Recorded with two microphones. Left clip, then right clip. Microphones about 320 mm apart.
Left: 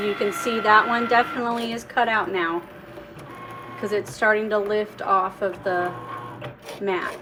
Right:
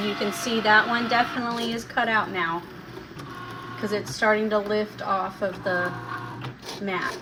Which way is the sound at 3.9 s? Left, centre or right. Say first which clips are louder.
Left 2 dB; left.